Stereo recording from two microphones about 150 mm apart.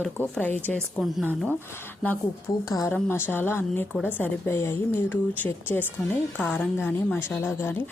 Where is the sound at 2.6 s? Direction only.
25° left (ahead or behind).